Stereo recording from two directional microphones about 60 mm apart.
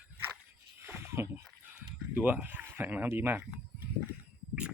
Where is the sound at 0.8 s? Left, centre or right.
Right.